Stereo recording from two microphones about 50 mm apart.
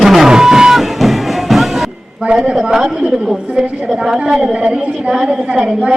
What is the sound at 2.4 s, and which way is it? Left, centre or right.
A woman's voice, centre.